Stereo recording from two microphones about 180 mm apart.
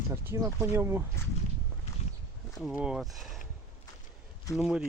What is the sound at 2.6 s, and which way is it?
Speech, 5° right (ahead or behind).